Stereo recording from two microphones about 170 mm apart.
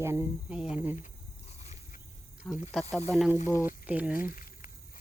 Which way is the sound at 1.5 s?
40° left (ahead or behind).